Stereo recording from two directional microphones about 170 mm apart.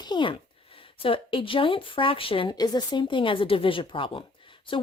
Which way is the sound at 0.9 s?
30° left (ahead or behind).